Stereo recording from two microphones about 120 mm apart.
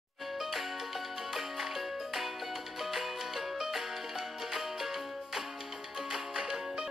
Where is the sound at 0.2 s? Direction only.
Centre (ahead or behind).